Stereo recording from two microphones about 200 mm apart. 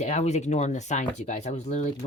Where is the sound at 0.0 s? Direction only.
35° left (ahead or behind).